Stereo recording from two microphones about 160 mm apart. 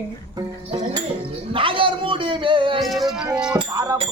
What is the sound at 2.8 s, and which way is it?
Music, centre (ahead or behind).